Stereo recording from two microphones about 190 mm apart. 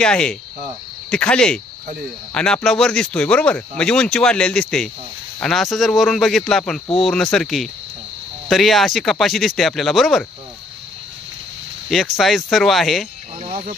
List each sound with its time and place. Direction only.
0.0 s speech: 5° left (ahead or behind)
11.9 s speech: centre (ahead or behind)
13.4 s a sound: 40° right (ahead or behind)